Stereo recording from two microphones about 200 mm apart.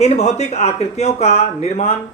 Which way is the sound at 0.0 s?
35° left (ahead or behind).